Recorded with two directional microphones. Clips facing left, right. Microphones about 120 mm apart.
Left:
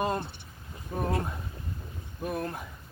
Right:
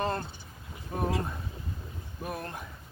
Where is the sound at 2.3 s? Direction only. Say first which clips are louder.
Left 4 dB; centre (ahead or behind).